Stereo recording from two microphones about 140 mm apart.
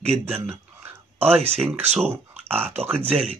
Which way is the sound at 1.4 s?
45° right (ahead or behind).